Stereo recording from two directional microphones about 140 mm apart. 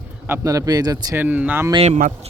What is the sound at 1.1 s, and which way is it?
Speech, 10° right (ahead or behind).